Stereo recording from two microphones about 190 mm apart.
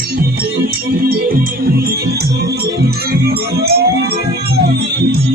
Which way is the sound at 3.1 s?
55° right (ahead or behind).